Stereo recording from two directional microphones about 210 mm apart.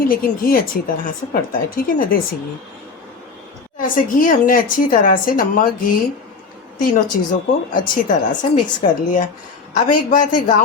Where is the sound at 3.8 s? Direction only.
40° left (ahead or behind).